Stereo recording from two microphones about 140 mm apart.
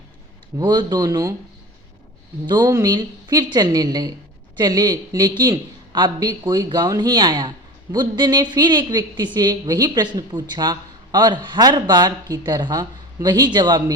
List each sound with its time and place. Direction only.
0.6 s speech: 30° right (ahead or behind)
2.5 s a woman's voice: 30° right (ahead or behind)